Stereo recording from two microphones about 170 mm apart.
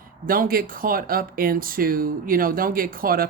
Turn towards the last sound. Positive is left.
turn(degrees=-60)  # may be behind; listen again after turning